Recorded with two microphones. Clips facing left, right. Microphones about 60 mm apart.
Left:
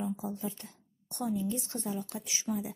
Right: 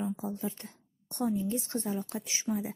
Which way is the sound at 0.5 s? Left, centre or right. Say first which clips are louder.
Right 2 dB; right.